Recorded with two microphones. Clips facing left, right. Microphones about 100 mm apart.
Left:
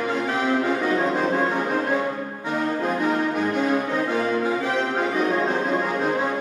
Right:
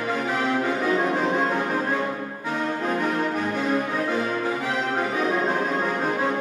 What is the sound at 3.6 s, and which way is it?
Music, 15° left (ahead or behind).